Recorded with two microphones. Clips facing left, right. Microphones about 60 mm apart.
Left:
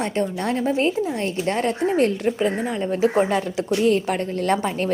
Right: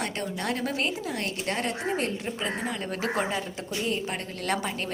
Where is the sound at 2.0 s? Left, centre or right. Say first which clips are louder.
Left 11 dB; left.